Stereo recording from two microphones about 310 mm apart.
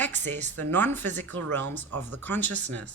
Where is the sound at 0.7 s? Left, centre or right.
Centre.